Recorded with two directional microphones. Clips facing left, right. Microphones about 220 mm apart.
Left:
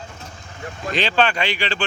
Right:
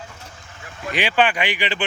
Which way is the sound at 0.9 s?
15° right (ahead or behind).